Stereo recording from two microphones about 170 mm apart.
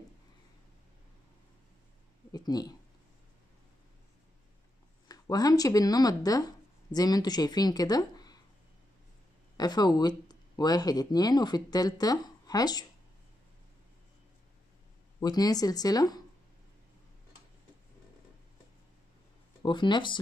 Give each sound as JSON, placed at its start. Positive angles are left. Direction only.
{"t": 2.3, "sound": "speech", "side_deg": 25}
{"t": 5.0, "sound": "speech", "side_deg": 20}
{"t": 9.6, "sound": "speech", "side_deg": 25}
{"t": 15.1, "sound": "speech", "side_deg": 20}
{"t": 19.6, "sound": "speech", "side_deg": 25}